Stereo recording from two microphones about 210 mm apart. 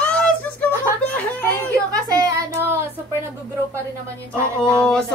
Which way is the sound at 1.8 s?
15° right (ahead or behind).